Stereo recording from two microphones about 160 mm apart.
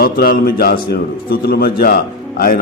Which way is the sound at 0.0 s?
70° left (ahead or behind).